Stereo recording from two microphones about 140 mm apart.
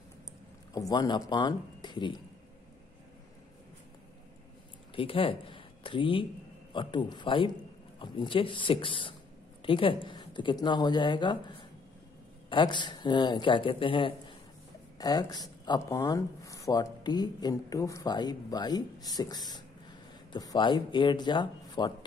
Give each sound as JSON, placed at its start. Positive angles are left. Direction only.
{"t": 0.7, "sound": "speech", "side_deg": 30}
{"t": 4.9, "sound": "speech", "side_deg": 40}